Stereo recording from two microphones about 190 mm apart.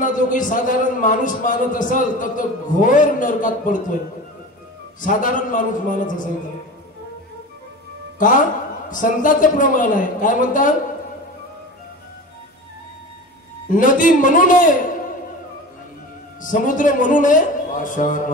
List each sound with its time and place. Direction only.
0.0 s a man's voice: 45° left (ahead or behind)
5.0 s a man's voice: 45° left (ahead or behind)
8.2 s a man's voice: 45° left (ahead or behind)
13.7 s a man's voice: 45° left (ahead or behind)
16.4 s a man's voice: 45° left (ahead or behind)